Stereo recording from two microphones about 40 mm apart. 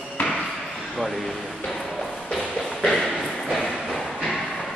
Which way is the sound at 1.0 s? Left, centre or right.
Centre.